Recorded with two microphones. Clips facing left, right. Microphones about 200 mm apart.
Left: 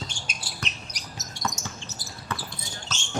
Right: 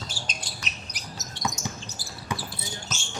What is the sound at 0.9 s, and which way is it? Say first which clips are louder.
Basketball bounce: right 1 dB; 5° right (ahead or behind).